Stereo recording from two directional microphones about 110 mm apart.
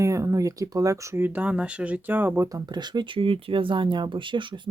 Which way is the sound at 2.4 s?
35° right (ahead or behind).